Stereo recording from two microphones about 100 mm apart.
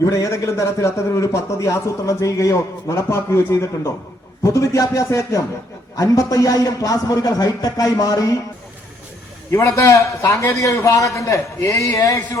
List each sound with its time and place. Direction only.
0.0 s a man's voice: 35° left (ahead or behind)
9.5 s a man's voice: 30° left (ahead or behind)